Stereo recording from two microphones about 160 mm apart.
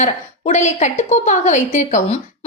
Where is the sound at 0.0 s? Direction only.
45° left (ahead or behind).